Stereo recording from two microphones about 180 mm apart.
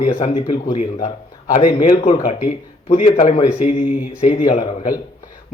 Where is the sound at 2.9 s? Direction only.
25° left (ahead or behind).